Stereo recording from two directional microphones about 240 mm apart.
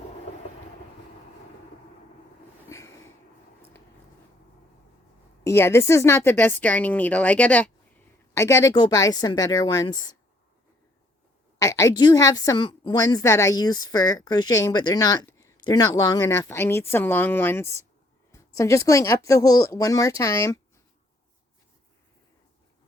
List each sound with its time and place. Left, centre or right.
2.6 s a sound: centre
5.5 s a woman's voice: centre
11.6 s a woman's voice: centre